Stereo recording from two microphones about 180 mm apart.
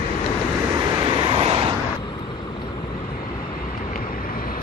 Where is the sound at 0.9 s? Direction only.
25° right (ahead or behind).